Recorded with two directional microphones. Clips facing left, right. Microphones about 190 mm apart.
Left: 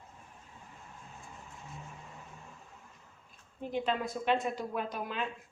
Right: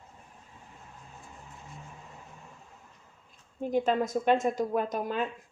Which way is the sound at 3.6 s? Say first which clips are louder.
Right 6 dB; 45° right (ahead or behind).